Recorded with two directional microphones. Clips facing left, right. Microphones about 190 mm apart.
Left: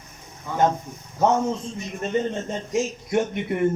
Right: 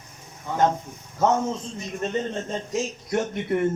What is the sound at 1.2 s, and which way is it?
A man's voice, 15° left (ahead or behind).